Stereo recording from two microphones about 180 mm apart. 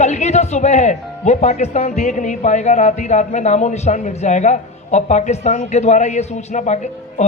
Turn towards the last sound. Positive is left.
turn(degrees=40)  # may be behind; listen again after turning